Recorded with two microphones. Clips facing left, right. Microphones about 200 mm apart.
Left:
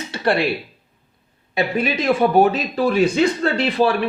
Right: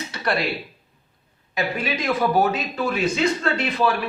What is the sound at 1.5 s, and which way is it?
Speech, 30° left (ahead or behind).